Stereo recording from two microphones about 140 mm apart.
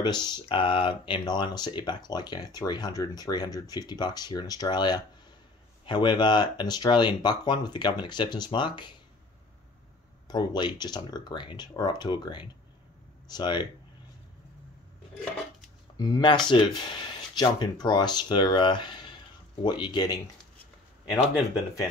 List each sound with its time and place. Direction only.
0.0 s speech: 30° left (ahead or behind)
10.2 s speech: 30° left (ahead or behind)
16.0 s speech: 30° left (ahead or behind)